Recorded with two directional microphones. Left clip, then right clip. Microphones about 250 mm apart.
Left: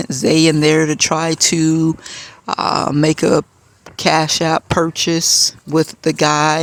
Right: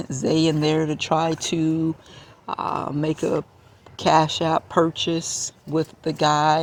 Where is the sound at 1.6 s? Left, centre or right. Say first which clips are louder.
Left 7 dB; left.